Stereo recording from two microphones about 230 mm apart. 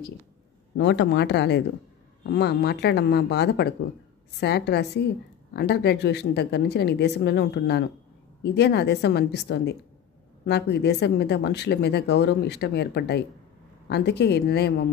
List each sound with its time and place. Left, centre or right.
0.7 s a woman's voice: left